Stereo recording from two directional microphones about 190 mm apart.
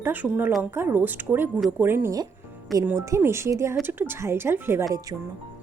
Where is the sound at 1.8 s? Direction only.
10° right (ahead or behind).